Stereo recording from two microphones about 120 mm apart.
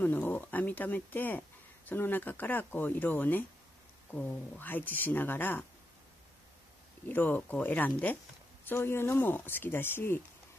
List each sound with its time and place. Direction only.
0.0 s speech: 15° left (ahead or behind)
7.1 s speech: 15° left (ahead or behind)